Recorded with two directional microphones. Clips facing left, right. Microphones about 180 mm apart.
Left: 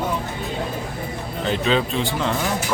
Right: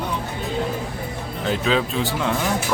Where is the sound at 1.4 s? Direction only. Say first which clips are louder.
Even; centre (ahead or behind).